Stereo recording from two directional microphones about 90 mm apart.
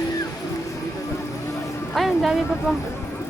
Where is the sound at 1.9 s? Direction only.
Centre (ahead or behind).